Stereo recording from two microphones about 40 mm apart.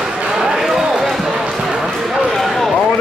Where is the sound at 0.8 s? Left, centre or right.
Centre.